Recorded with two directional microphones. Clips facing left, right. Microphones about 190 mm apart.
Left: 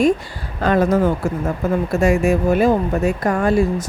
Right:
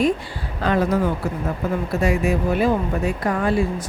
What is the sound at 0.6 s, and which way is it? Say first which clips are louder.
Speech: left 4 dB; 45° left (ahead or behind).